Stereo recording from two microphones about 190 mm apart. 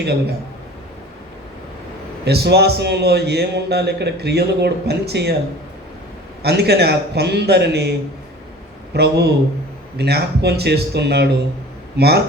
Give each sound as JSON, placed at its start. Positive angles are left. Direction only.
{"t": 2.2, "sound": "a man's voice", "side_deg": -60}
{"t": 6.4, "sound": "a man's voice", "side_deg": -60}